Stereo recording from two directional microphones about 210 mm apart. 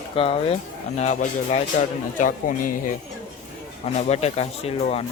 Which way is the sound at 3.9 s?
30° left (ahead or behind).